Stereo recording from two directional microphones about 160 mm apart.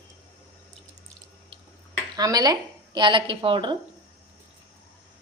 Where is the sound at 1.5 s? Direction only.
35° right (ahead or behind).